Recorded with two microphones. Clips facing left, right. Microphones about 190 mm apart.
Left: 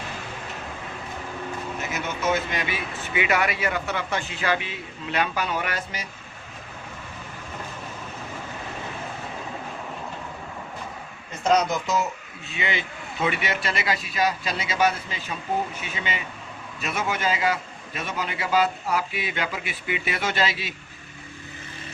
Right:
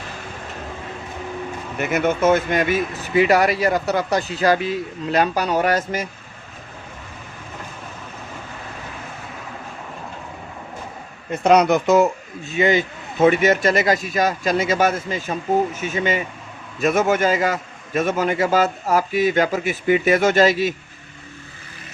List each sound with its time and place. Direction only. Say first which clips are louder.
1.8 s speech: right 12 dB; 55° right (ahead or behind)
11.3 s a man's voice: right 7 dB; 65° right (ahead or behind); by 20.7 s 45° right (ahead or behind)